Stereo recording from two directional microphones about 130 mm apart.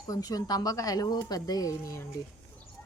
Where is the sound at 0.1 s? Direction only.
30° left (ahead or behind).